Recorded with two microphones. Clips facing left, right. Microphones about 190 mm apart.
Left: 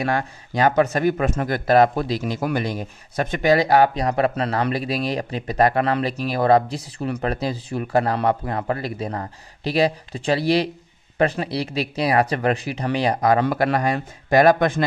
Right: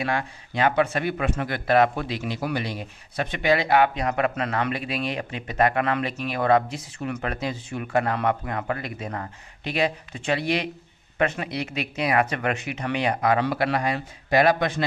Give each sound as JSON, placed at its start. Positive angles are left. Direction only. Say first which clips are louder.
{"t": 0.0, "sound": "speech", "louder": "left 4 dB", "side_deg": 40}